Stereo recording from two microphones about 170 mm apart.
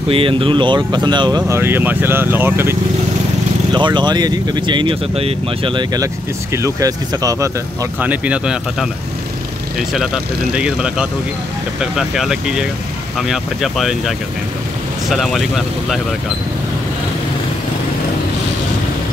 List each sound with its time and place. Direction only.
0.1 s speech: 30° right (ahead or behind)
1.5 s speech: 15° right (ahead or behind)
3.7 s speech: 25° right (ahead or behind)
6.5 s speech: 20° right (ahead or behind)
8.0 s speech: 10° right (ahead or behind)